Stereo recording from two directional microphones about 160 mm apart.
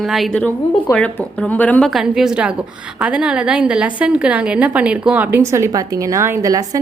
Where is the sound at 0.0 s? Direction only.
Centre (ahead or behind).